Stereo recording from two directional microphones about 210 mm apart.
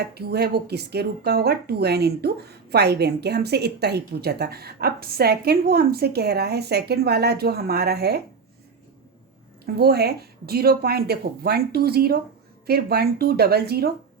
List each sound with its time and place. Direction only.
0.0 s a woman's voice: 50° right (ahead or behind)
9.6 s a woman's voice: 50° right (ahead or behind)